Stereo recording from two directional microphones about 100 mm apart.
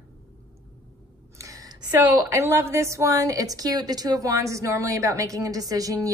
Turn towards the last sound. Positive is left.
turn(degrees=-35)  # may be behind; listen again after turning